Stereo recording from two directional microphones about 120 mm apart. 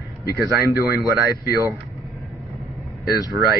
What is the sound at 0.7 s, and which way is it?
Speech, 25° right (ahead or behind).